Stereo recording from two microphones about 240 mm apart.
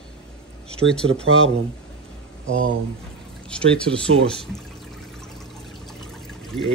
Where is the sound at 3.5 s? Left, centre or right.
Centre.